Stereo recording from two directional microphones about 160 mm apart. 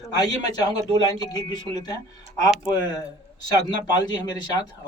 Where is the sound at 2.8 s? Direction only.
25° left (ahead or behind).